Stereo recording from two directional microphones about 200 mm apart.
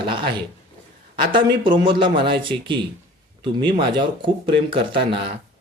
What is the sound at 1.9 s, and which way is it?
Speech, 25° right (ahead or behind).